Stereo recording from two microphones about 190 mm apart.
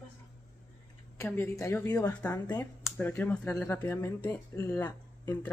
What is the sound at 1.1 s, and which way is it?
Speech, 15° left (ahead or behind).